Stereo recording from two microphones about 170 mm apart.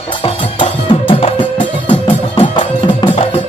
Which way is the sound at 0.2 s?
30° left (ahead or behind).